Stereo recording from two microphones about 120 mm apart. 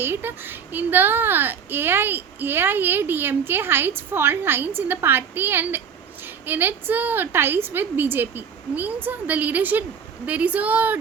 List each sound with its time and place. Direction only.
0.0 s speech: 15° right (ahead or behind)